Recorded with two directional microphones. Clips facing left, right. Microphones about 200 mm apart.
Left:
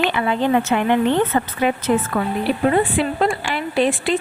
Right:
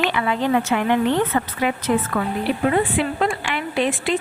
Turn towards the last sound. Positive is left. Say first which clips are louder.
# left 3 dB
turn(degrees=35)  # may be behind; listen again after turning